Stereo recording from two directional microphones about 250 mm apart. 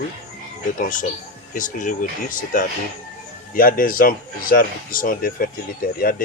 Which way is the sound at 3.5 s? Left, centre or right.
Left.